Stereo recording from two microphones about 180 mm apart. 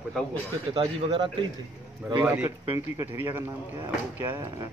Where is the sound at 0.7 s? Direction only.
25° right (ahead or behind).